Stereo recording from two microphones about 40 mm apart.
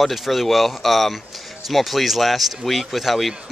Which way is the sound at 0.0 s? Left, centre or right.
Centre.